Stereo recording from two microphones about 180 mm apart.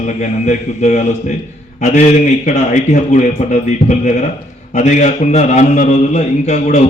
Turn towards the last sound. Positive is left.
turn(degrees=40)  # may be behind; listen again after turning